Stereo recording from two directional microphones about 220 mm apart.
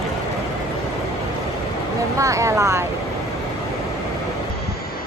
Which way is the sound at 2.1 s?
15° right (ahead or behind).